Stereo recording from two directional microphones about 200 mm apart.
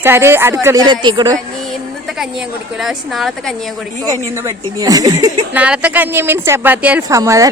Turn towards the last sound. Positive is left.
turn(degrees=-15)  # may be behind; listen again after turning